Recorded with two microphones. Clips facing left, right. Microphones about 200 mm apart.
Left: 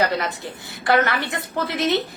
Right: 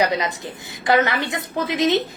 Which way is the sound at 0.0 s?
15° right (ahead or behind).